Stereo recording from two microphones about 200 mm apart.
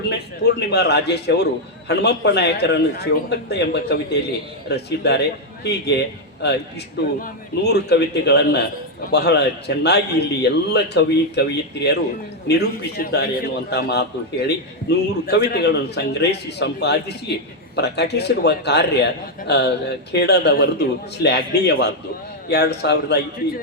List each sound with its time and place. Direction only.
0.1 s a man's voice: 55° left (ahead or behind)